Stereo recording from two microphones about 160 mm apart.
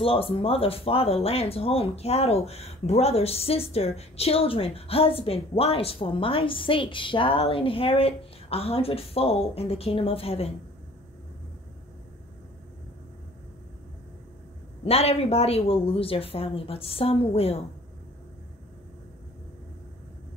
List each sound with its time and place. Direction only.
0.0 s speech: 35° left (ahead or behind)
14.9 s speech: 40° left (ahead or behind)